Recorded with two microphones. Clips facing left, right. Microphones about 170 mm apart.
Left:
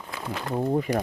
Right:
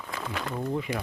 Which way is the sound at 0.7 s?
45° left (ahead or behind).